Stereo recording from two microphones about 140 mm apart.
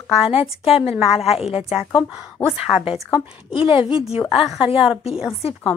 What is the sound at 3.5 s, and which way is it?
Speech, 40° left (ahead or behind).